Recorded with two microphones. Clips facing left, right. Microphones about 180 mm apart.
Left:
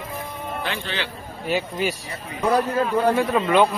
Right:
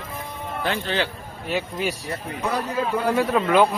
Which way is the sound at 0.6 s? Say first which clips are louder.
Right 6 dB; 45° right (ahead or behind).